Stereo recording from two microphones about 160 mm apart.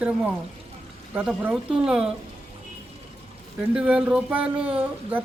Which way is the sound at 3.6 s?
5° right (ahead or behind).